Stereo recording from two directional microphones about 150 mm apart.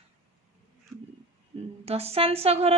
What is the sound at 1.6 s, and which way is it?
A woman's voice, 45° right (ahead or behind).